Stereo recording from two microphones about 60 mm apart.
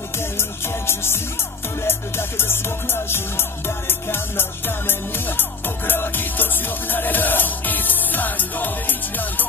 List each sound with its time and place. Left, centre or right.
0.4 s music: left